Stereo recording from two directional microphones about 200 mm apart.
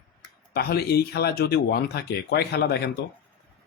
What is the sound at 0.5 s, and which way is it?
Speech, 50° left (ahead or behind).